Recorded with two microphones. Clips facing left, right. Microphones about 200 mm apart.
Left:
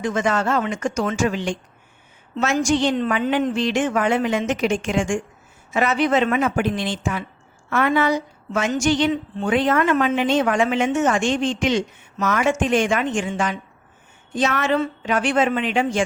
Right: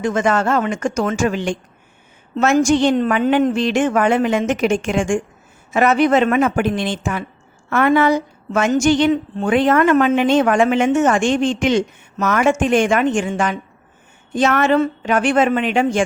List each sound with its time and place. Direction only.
0.0 s a woman's voice: 50° right (ahead or behind)